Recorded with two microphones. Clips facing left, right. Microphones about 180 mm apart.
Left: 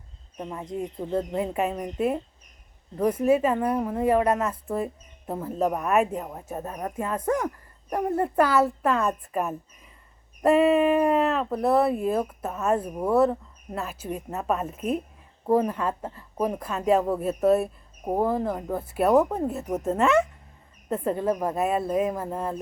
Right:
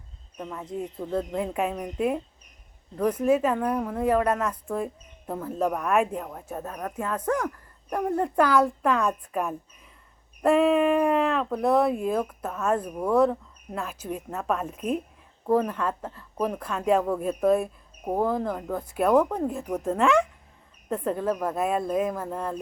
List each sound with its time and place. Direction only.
0.3 s speech: 15° left (ahead or behind)